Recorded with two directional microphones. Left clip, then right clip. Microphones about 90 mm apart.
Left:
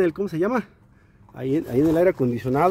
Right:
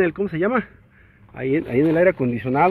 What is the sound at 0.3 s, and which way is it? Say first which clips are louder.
Speech: right 2 dB; 30° left (ahead or behind).